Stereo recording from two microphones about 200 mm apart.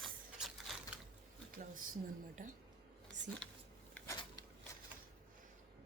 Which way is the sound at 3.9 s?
15° left (ahead or behind).